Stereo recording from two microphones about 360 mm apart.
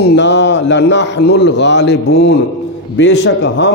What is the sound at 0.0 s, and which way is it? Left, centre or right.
A man's voice, left.